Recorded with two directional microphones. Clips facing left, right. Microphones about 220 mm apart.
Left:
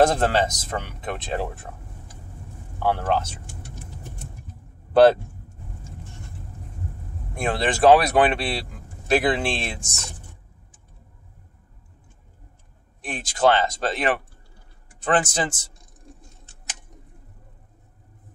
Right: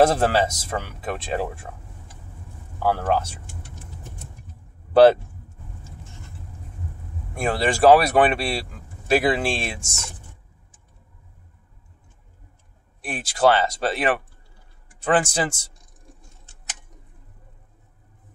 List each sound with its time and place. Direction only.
0.0 s speech: 10° right (ahead or behind)
2.8 s speech: 5° right (ahead or behind)
7.3 s speech: 5° right (ahead or behind)
9.8 s speech: 25° right (ahead or behind)
13.0 s speech: 10° right (ahead or behind)